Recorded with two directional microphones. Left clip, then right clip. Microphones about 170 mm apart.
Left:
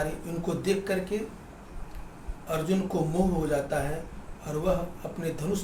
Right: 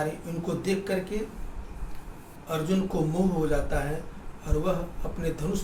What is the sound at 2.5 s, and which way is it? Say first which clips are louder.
A man's voice: even; 20° left (ahead or behind).